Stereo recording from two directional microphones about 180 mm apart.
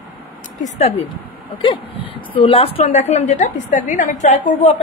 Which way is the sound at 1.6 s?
30° left (ahead or behind).